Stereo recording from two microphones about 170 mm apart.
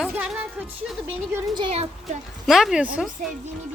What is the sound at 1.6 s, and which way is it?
Speech, 35° right (ahead or behind).